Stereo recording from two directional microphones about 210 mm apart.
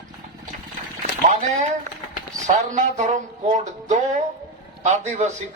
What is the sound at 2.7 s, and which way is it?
A man's voice, 35° right (ahead or behind).